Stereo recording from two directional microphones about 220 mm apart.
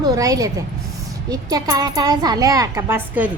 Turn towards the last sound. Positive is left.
turn(degrees=-10)  # may be behind; listen again after turning